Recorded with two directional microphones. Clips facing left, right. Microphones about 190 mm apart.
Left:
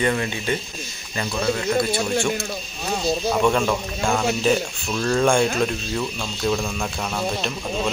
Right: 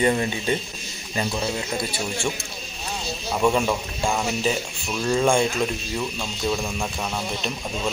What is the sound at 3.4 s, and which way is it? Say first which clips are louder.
Speech: right 3 dB; 10° right (ahead or behind).